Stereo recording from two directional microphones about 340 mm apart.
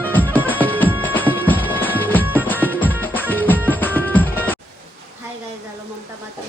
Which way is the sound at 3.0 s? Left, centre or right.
Centre.